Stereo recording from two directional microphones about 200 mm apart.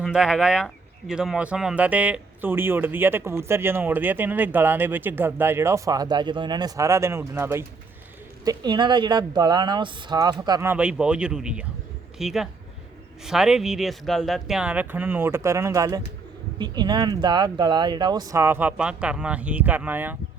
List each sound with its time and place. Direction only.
0.0 s speech: 5° right (ahead or behind)